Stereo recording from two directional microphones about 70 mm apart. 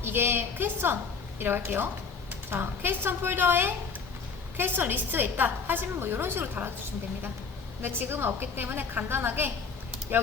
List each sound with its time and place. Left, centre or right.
0.0 s a woman's voice: right
7.8 s a woman's voice: right